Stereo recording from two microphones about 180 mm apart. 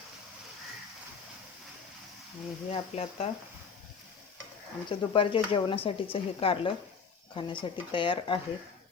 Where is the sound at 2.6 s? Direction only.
35° left (ahead or behind).